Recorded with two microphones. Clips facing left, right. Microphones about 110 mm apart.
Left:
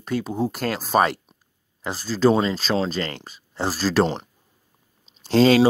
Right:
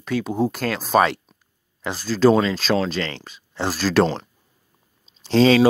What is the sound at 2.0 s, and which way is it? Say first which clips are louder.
Speech: right 2 dB; 25° left (ahead or behind).